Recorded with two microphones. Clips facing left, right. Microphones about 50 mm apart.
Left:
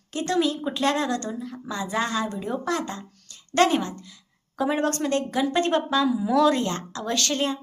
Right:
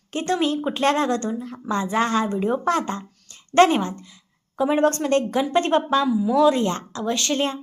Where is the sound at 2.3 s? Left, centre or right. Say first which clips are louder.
Right 6 dB; right.